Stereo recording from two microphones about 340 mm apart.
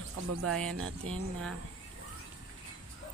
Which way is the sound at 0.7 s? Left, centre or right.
Right.